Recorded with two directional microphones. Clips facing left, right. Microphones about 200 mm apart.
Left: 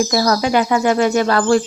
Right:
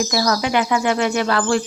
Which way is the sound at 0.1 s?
40° left (ahead or behind).